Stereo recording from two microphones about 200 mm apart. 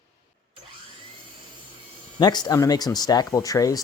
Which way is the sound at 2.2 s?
20° left (ahead or behind).